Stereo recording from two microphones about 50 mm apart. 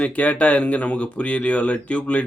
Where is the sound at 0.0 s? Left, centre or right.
Left.